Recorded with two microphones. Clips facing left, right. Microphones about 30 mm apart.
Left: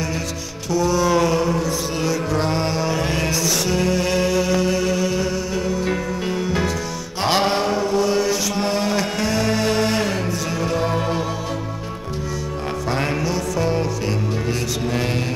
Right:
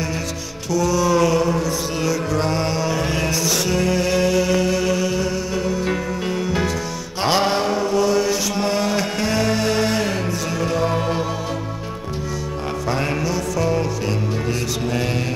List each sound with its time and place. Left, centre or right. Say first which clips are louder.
0.7 s music: even; left
1.3 s mantra: right 1 dB; centre
2.9 s music: even; centre
7.5 s mantra: even; centre
8.2 s chant: even; centre
10.6 s music: right 1 dB; centre
13.2 s music: even; centre